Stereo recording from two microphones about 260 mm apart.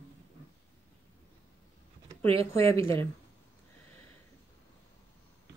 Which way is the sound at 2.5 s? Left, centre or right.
Centre.